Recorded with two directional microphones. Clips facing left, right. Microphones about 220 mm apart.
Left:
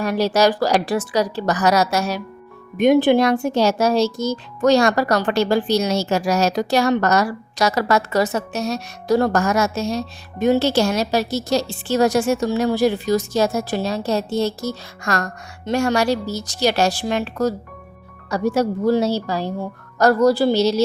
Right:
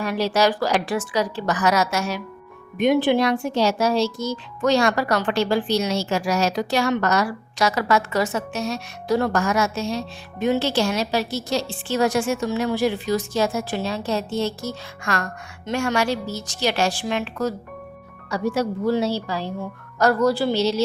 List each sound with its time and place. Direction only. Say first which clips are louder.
0.0 s speech: left 3 dB; 40° left (ahead or behind)